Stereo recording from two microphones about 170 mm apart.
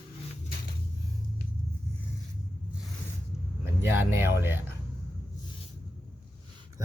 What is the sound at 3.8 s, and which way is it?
Speech, 15° right (ahead or behind).